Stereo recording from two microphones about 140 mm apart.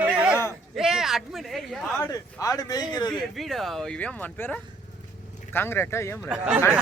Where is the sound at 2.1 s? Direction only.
25° left (ahead or behind).